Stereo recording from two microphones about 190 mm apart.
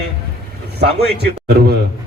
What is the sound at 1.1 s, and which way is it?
Speech, 60° right (ahead or behind).